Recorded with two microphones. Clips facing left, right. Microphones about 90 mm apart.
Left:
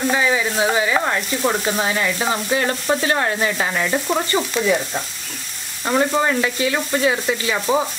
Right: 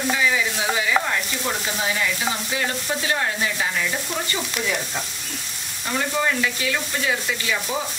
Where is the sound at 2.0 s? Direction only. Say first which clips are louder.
Left 4 dB; 45° left (ahead or behind).